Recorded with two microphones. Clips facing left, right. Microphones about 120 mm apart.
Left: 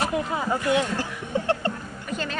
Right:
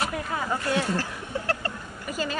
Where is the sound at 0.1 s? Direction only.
20° left (ahead or behind).